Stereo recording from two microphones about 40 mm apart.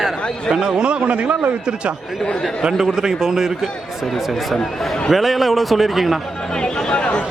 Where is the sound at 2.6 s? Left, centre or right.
Centre.